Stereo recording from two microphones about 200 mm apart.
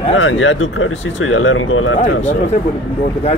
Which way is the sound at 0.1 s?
75° left (ahead or behind).